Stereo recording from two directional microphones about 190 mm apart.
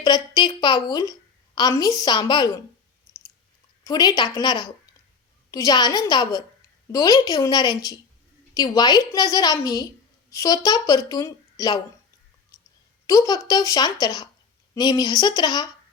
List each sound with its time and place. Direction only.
0.0 s a woman's voice: 20° left (ahead or behind)
3.1 s chewing: 15° left (ahead or behind)
3.8 s a woman's voice: 20° left (ahead or behind)
13.1 s a woman's voice: 20° left (ahead or behind)